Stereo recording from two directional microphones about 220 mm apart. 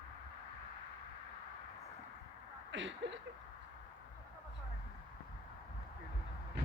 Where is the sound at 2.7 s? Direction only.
55° right (ahead or behind).